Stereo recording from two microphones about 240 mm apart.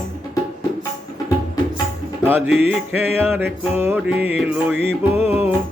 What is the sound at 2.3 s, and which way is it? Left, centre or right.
Music, centre.